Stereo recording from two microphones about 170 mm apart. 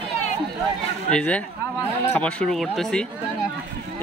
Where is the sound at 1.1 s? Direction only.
5° left (ahead or behind).